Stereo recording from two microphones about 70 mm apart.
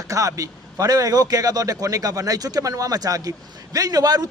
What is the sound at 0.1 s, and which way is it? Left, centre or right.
A man's voice, right.